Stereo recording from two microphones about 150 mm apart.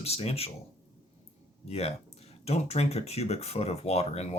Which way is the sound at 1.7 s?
45° left (ahead or behind).